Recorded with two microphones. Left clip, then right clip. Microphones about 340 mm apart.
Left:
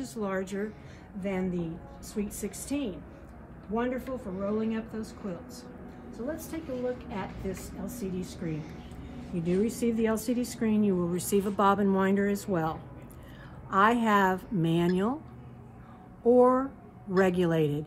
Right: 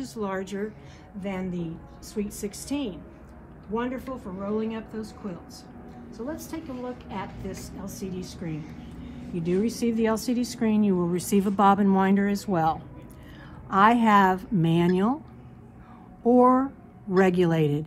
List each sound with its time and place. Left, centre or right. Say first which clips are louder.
0.0 s a woman's voice: right 2 dB; centre
13.7 s speech: right 5 dB; centre
17.3 s a woman's voice: right 4 dB; centre